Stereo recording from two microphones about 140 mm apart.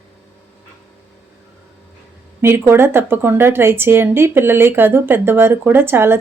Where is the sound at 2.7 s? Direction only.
15° right (ahead or behind).